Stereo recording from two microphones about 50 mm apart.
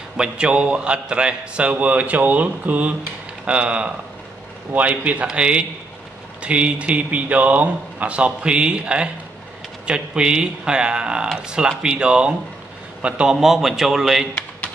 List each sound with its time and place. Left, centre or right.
0.2 s a man's voice: centre
13.3 s a man's voice: centre